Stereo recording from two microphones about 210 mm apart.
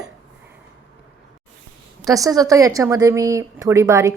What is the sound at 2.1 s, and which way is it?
A woman's voice, 15° right (ahead or behind).